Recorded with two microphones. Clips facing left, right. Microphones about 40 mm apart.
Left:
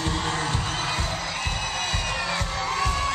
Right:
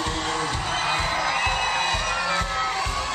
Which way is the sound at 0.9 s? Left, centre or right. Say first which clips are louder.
Right 5 dB; right.